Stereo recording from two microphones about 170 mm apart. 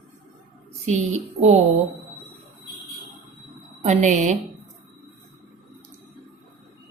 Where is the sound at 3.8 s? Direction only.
40° right (ahead or behind).